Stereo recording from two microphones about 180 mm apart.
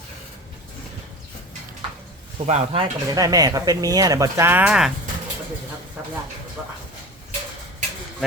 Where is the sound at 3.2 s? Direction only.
20° right (ahead or behind).